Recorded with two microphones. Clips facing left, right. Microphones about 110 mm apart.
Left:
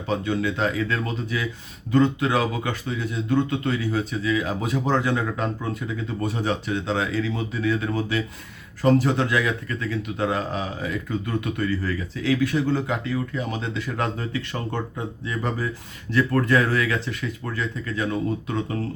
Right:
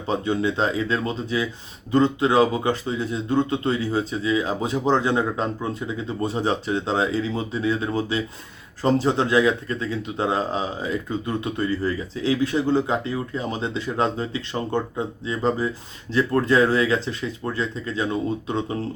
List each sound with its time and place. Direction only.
0.1 s a man's voice: 30° right (ahead or behind)